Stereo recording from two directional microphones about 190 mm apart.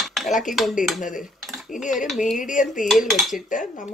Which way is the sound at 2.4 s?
45° left (ahead or behind).